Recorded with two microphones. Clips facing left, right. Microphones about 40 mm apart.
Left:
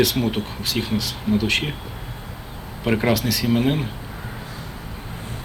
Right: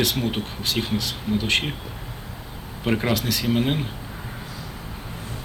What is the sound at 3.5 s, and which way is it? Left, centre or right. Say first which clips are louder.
Speech: left 3 dB; right.